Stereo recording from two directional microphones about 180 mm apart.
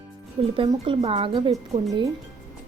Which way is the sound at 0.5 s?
30° right (ahead or behind).